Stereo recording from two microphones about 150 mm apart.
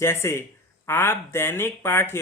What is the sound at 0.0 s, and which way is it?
Speech, 15° left (ahead or behind).